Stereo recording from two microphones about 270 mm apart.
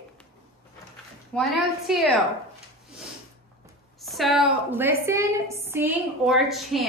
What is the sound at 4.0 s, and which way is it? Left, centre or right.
A woman's voice, centre.